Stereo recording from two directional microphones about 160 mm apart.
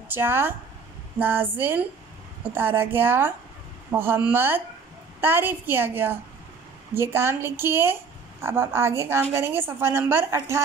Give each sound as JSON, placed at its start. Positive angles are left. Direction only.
{"t": 0.1, "sound": "a woman's voice", "side_deg": -15}